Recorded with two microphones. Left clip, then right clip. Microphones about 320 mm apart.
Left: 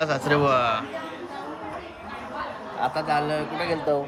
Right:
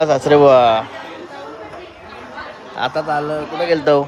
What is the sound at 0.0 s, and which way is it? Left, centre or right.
Speech, centre.